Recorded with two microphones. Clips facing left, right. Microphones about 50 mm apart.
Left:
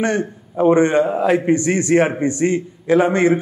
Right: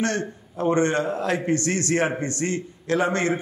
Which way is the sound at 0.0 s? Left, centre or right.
Centre.